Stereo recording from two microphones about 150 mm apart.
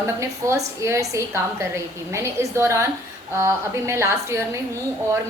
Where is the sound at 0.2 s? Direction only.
20° right (ahead or behind).